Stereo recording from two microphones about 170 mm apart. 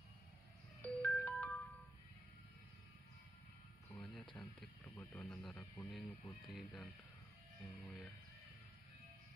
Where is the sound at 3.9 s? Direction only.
5° left (ahead or behind).